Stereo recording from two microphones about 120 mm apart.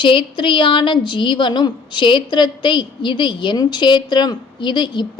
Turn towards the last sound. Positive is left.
turn(degrees=40)  # may be behind; listen again after turning